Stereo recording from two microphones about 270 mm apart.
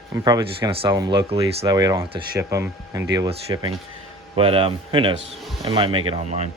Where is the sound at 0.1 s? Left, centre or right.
Centre.